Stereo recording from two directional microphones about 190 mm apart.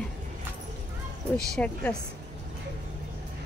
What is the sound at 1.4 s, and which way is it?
Speech, 5° left (ahead or behind).